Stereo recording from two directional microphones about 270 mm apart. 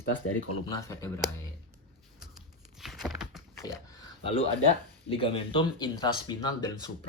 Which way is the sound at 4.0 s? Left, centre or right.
Centre.